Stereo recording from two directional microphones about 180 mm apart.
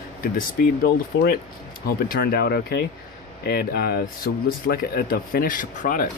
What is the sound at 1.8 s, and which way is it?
Speech, 55° left (ahead or behind).